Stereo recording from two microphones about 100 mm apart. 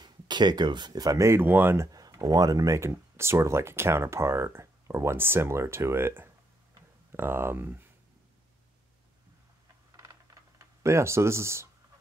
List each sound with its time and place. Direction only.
0.0 s speech: 45° right (ahead or behind); by 1.9 s 20° right (ahead or behind)
1.9 s speech: 40° right (ahead or behind); by 7.8 s 20° right (ahead or behind)
10.6 s speech: 30° right (ahead or behind)